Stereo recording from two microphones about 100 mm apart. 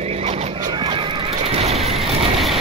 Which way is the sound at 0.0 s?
90° right.